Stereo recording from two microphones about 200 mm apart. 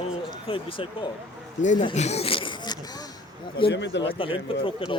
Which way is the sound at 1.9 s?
35° left (ahead or behind).